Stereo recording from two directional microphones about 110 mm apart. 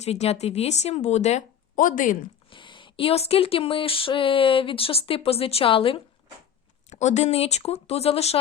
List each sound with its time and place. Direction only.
0.0 s speech: 75° left (ahead or behind)
2.5 s speech: 50° left (ahead or behind)
6.9 s speech: 90° left; by 8.4 s 65° left (ahead or behind)